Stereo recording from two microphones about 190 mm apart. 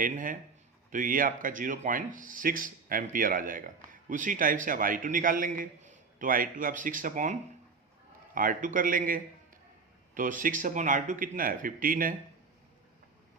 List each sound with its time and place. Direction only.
0.0 s a man's voice: 45° right (ahead or behind)
8.4 s a man's voice: 45° right (ahead or behind)